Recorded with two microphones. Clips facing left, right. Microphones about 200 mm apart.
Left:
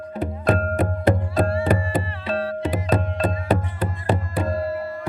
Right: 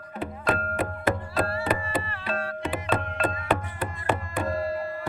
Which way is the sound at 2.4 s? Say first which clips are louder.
Left 6 dB; 35° left (ahead or behind).